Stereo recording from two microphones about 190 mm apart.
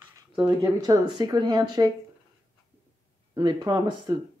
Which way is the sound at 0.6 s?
20° right (ahead or behind).